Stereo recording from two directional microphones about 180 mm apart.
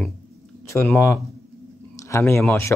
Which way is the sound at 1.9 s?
15° left (ahead or behind).